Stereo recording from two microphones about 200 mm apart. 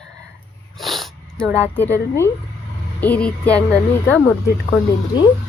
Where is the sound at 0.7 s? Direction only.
Centre (ahead or behind).